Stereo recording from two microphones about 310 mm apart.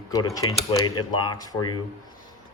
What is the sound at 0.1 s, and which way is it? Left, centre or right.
Speech, centre.